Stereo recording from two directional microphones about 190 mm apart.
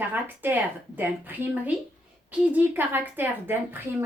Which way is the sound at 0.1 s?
10° right (ahead or behind).